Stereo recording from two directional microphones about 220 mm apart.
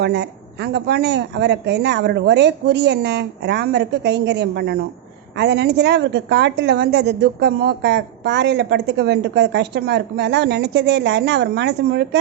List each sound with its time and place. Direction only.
0.0 s a woman's voice: 50° right (ahead or behind)